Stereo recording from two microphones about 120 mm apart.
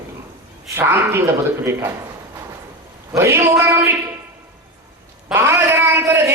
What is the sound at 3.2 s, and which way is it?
Speech, 25° right (ahead or behind).